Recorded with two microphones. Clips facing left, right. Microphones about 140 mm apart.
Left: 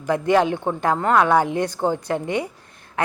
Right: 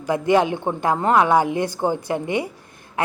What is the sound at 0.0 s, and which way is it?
A woman's voice, 15° right (ahead or behind).